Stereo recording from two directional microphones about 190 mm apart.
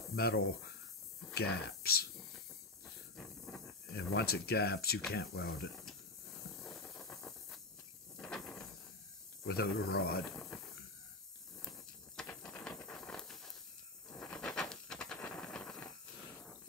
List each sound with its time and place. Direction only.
0.1 s speech: 55° left (ahead or behind)
2.3 s hiss: 5° left (ahead or behind)
3.9 s speech: 60° left (ahead or behind)
6.6 s hiss: 5° left (ahead or behind)
8.2 s mechanisms: 5° left (ahead or behind)
9.5 s speech: 55° left (ahead or behind)
10.3 s a sound: 5° left (ahead or behind)
12.2 s a sound: 5° left (ahead or behind)
15.2 s steam: 5° left (ahead or behind)